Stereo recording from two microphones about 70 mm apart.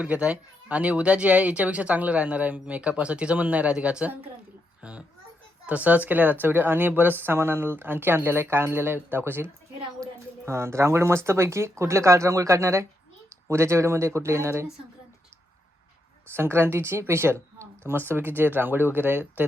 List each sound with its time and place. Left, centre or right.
0.0 s a child's voice: centre; by 14.7 s right
16.3 s speech: right